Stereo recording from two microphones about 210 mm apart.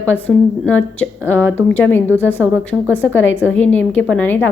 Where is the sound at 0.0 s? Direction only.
5° left (ahead or behind).